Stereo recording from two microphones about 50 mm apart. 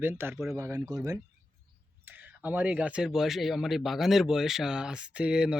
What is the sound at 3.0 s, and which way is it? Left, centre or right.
Speech, centre.